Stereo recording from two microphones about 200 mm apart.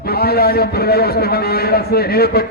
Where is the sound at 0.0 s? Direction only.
50° left (ahead or behind).